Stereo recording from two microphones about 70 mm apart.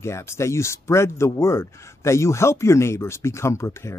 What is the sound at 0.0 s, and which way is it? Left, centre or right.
Speech, left.